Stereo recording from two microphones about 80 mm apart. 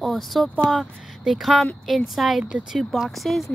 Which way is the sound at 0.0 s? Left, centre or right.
Centre.